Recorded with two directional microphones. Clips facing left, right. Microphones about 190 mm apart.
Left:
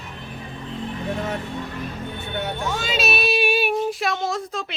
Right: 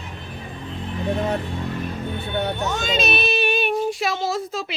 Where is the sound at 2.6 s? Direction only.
5° left (ahead or behind).